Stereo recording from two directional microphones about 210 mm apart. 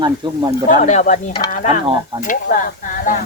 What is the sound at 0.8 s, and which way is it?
Speech, 35° left (ahead or behind).